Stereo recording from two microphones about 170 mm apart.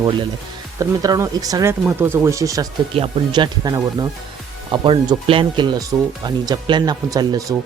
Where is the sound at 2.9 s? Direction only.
30° right (ahead or behind).